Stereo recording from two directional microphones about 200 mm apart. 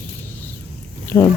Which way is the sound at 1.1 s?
15° left (ahead or behind).